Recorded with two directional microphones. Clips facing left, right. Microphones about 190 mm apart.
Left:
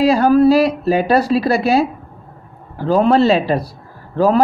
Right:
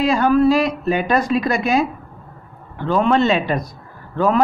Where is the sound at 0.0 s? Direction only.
40° left (ahead or behind).